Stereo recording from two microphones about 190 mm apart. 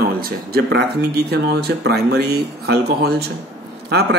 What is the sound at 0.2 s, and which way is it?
Speech, 55° right (ahead or behind).